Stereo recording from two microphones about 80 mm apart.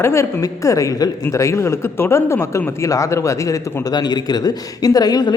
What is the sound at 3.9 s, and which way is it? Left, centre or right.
Speech, left.